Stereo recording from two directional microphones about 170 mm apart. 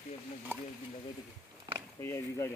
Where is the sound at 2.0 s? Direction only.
15° left (ahead or behind).